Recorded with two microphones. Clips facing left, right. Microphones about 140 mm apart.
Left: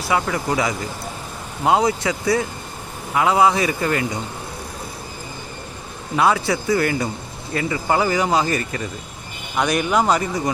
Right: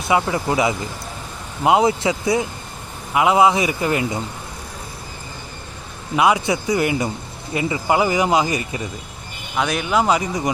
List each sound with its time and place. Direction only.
0.0 s a man's voice: 20° right (ahead or behind)
6.1 s a man's voice: 15° right (ahead or behind)
9.6 s speech: centre (ahead or behind)